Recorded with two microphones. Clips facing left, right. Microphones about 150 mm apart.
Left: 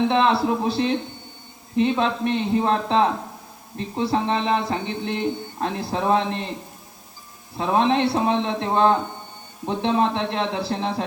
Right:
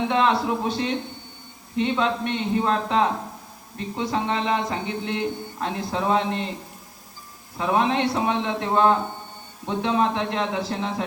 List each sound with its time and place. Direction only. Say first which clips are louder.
0.1 s speech: left 2 dB; 30° left (ahead or behind)
7.5 s a man's voice: left 2 dB; 30° left (ahead or behind)